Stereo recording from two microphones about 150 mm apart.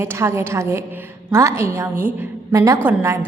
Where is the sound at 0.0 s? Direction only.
15° right (ahead or behind).